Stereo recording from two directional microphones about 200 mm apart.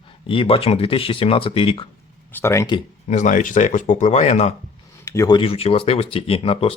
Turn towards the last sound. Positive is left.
turn(degrees=30)  # may be behind; listen again after turning